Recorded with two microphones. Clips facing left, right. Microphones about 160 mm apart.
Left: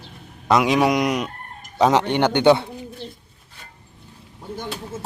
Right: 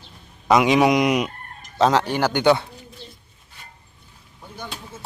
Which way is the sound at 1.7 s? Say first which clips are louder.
Left 1 dB; 15° left (ahead or behind).